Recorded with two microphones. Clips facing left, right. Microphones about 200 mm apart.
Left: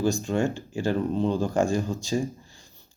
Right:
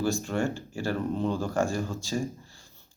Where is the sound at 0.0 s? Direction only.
15° left (ahead or behind).